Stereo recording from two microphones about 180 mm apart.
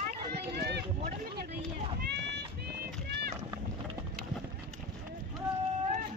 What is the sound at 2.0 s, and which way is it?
Run, 75° right (ahead or behind).